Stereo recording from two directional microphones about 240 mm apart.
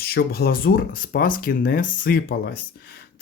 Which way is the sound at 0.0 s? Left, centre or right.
Left.